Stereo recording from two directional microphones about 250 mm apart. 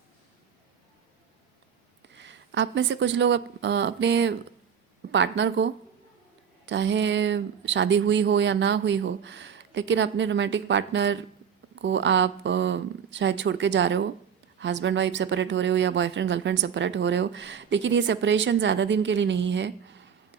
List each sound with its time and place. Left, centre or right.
2.0 s speech: right